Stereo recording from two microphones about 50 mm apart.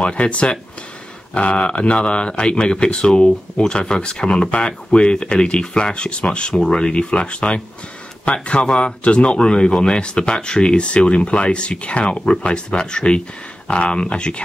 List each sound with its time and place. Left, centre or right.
0.0 s speech: left